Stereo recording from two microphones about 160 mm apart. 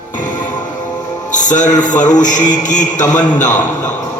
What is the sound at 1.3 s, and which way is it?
A man's voice, 50° left (ahead or behind).